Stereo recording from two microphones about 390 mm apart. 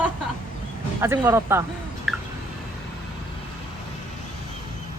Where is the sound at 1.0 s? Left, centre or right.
Centre.